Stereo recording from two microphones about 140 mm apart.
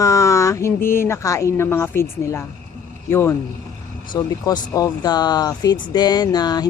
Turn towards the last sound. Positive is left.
turn(degrees=30)  # may be behind; listen again after turning